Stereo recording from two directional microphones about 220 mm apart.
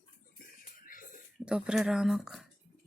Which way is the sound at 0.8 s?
35° left (ahead or behind).